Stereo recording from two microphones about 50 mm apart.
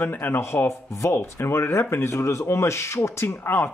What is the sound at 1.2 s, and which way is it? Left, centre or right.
Speech, left.